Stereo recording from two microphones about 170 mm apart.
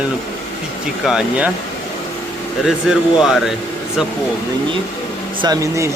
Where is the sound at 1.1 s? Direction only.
5° right (ahead or behind).